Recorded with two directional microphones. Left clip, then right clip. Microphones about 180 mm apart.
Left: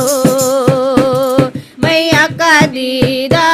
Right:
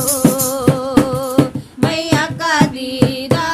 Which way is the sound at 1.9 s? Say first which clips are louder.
Left 8 dB; 20° left (ahead or behind).